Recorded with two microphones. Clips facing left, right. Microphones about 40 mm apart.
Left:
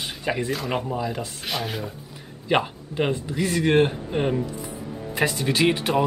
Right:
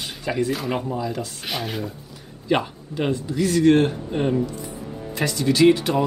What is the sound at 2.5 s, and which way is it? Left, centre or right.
Speech, centre.